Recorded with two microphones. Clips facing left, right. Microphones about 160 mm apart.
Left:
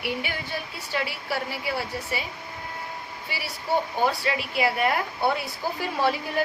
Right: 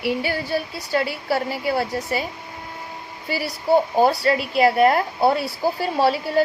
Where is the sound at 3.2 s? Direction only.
40° right (ahead or behind).